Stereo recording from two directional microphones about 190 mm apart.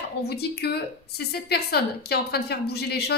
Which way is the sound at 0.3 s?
60° left (ahead or behind).